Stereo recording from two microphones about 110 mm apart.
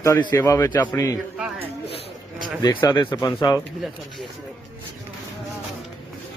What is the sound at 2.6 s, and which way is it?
Speech, 40° left (ahead or behind).